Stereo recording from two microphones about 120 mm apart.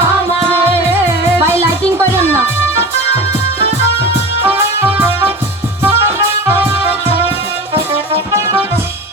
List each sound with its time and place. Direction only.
0.5 s music: 20° right (ahead or behind)
4.4 s music: 15° right (ahead or behind)
8.3 s music: 25° right (ahead or behind)